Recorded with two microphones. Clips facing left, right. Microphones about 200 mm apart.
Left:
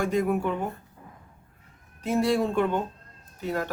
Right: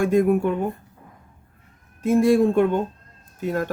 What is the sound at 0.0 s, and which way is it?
Speech, 50° right (ahead or behind).